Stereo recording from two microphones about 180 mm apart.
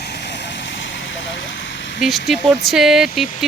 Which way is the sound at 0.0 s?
65° left (ahead or behind).